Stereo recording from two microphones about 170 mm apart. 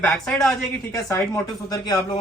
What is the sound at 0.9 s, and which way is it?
Speech, 15° left (ahead or behind).